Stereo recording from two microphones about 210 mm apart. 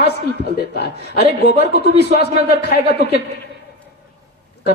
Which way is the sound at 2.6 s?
50° left (ahead or behind).